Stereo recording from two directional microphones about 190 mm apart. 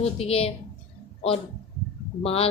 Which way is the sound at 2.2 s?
30° left (ahead or behind).